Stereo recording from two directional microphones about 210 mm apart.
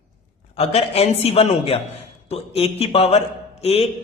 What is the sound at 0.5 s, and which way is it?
A man's voice, 30° left (ahead or behind).